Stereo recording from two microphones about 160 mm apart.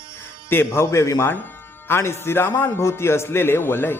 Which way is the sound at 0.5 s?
15° left (ahead or behind).